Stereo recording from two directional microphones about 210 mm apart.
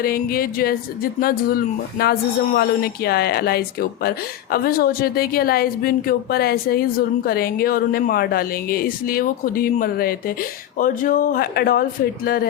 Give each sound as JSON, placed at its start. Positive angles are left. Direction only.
{"t": 0.0, "sound": "a woman's voice", "side_deg": 45}